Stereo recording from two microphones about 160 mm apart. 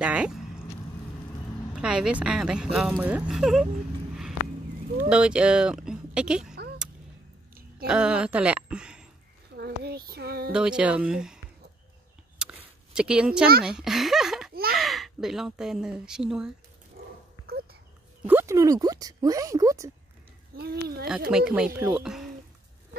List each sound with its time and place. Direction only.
0.0 s a sound: 5° right (ahead or behind)
1.8 s speech: 5° right (ahead or behind)
5.1 s speech: 5° right (ahead or behind)
7.8 s a woman's voice: 5° right (ahead or behind)
9.6 s a sound: 85° right
10.5 s speech: 5° right (ahead or behind)
12.4 s a sound: 5° right (ahead or behind)
13.7 s speech: 5° right (ahead or behind)
14.5 s a sound: 70° right (ahead or behind)
14.8 s speech: centre (ahead or behind)
17.0 s dog: 65° right (ahead or behind)
18.2 s speech: 15° right (ahead or behind)
20.5 s speech: 75° right (ahead or behind)
21.3 s a woman's voice: 5° right (ahead or behind)